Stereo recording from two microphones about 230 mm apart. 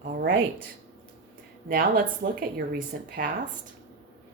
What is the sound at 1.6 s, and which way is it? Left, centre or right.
Speech, right.